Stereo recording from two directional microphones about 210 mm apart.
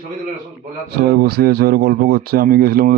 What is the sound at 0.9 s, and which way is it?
A man's voice, 50° right (ahead or behind).